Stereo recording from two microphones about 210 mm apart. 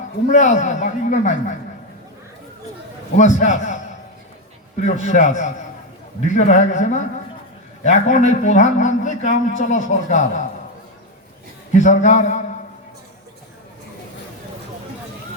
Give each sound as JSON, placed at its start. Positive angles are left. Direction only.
{"t": 0.3, "sound": "a man's voice", "side_deg": 35}
{"t": 3.2, "sound": "a man's voice", "side_deg": 35}
{"t": 4.9, "sound": "a man's voice", "side_deg": 35}
{"t": 11.7, "sound": "a man's voice", "side_deg": 35}